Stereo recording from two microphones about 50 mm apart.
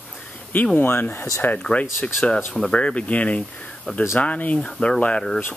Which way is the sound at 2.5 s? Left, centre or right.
Centre.